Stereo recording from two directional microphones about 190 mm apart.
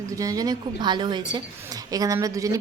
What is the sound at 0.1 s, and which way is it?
A woman's voice, 15° right (ahead or behind).